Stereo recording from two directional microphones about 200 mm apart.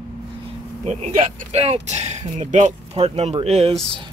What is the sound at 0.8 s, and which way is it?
Speech, 35° right (ahead or behind).